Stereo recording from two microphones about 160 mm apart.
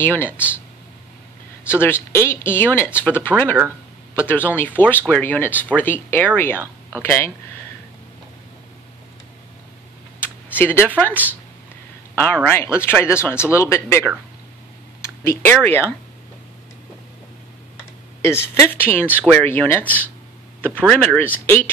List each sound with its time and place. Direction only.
0.0 s speech: 15° left (ahead or behind)
1.8 s speech: 15° left (ahead or behind)
10.2 s speech: 10° left (ahead or behind)
12.7 s speech: 15° left (ahead or behind)
18.2 s speech: 15° left (ahead or behind)